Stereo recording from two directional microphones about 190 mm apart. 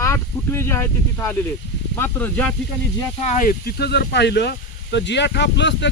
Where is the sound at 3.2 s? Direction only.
45° left (ahead or behind).